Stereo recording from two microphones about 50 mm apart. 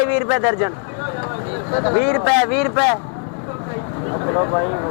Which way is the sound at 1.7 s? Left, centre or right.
Left.